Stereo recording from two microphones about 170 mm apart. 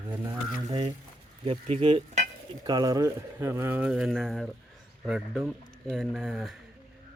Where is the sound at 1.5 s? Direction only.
35° right (ahead or behind).